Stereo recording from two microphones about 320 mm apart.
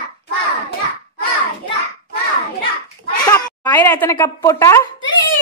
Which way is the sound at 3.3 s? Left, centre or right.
Centre.